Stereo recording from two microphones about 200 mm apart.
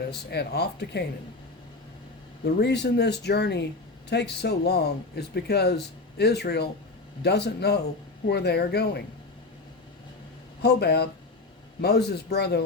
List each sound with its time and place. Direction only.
0.0 s speech: 55° left (ahead or behind)
2.4 s speech: 55° left (ahead or behind)
10.6 s speech: 55° left (ahead or behind)